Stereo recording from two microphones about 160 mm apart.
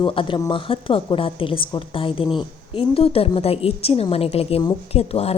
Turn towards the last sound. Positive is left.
turn(degrees=40)  # may be behind; listen again after turning